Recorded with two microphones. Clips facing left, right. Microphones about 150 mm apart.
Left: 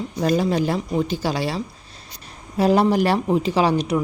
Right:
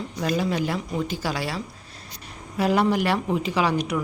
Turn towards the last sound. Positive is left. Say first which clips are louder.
# left 4 dB
turn(degrees=30)  # may be behind; listen again after turning